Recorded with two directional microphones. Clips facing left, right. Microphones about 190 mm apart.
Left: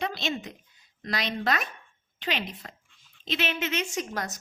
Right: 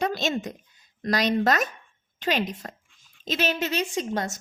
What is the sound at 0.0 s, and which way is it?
A woman's voice, 45° right (ahead or behind).